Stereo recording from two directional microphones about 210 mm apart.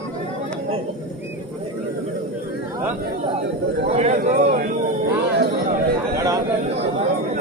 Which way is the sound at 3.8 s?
35° right (ahead or behind).